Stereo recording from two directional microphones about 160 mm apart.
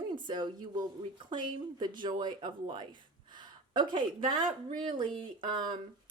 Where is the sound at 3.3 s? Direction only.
30° right (ahead or behind).